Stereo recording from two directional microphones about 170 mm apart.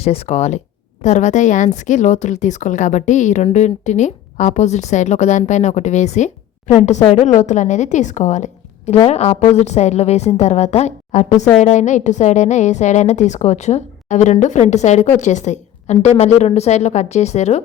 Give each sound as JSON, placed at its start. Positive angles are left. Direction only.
{"t": 0.0, "sound": "a woman's voice", "side_deg": 35}